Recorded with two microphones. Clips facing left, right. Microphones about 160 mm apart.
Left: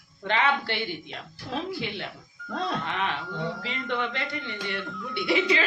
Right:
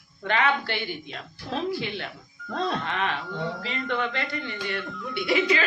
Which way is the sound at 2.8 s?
20° left (ahead or behind).